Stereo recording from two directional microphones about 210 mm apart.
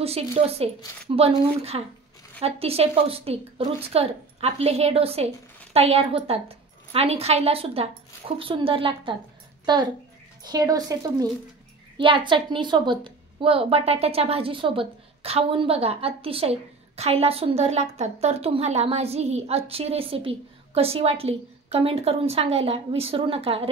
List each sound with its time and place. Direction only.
0.0 s a woman's voice: 30° right (ahead or behind)